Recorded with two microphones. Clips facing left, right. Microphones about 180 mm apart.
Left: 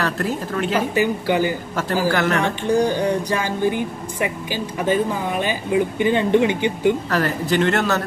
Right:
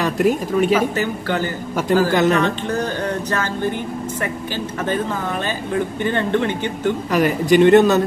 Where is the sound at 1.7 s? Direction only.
10° right (ahead or behind).